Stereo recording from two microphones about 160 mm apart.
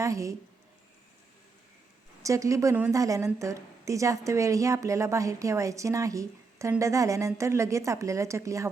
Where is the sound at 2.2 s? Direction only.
20° right (ahead or behind).